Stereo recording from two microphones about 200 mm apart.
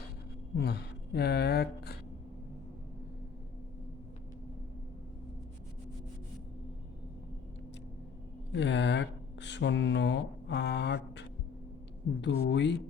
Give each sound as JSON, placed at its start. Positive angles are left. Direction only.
{"t": 0.5, "sound": "speech", "side_deg": 55}
{"t": 8.5, "sound": "speech", "side_deg": 60}